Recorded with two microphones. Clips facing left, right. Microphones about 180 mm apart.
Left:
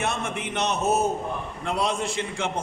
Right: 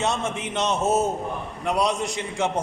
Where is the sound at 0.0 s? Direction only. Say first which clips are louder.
Right 3 dB; 25° right (ahead or behind).